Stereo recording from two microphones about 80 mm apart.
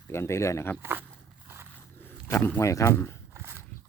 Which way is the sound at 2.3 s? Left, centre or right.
Left.